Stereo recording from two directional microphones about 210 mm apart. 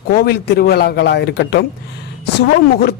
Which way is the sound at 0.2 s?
50° left (ahead or behind).